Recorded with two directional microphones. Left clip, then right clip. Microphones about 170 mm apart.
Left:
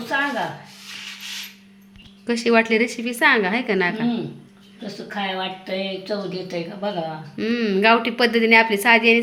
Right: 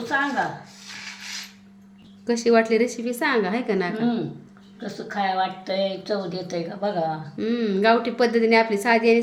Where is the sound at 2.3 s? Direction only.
Centre (ahead or behind).